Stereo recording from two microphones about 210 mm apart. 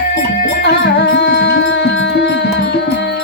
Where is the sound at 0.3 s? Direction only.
45° left (ahead or behind).